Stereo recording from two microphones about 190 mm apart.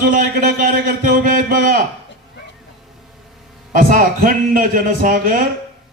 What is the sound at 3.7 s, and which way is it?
Speech, 45° right (ahead or behind).